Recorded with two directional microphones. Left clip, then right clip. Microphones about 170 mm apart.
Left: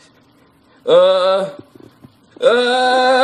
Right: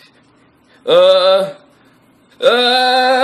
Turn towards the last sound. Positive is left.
turn(degrees=-5)  # may be behind; listen again after turning